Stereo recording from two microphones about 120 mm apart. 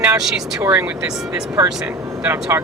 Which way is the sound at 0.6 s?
15° right (ahead or behind).